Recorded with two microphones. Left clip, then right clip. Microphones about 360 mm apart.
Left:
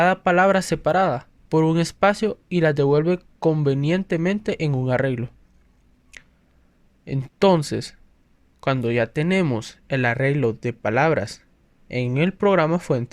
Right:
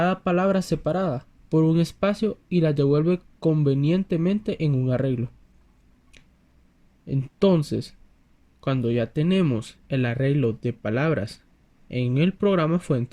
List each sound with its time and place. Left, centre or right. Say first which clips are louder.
0.0 s speech: left 6 dB; centre
6.1 s squish: left 10 dB; centre
7.0 s speech: left 4 dB; centre